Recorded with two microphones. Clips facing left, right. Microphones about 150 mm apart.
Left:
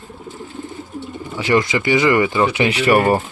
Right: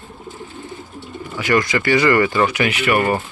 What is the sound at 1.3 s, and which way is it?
Speech, 25° left (ahead or behind).